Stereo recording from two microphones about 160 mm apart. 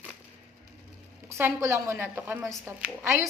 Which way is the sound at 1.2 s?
15° right (ahead or behind).